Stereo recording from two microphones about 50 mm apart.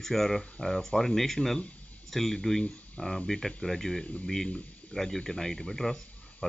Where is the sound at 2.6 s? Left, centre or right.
Left.